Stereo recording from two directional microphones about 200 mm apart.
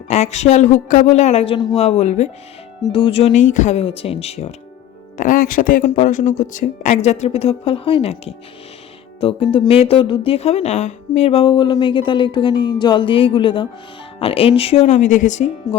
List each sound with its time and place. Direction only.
0.1 s speech: 35° left (ahead or behind)
5.1 s speech: 40° left (ahead or behind)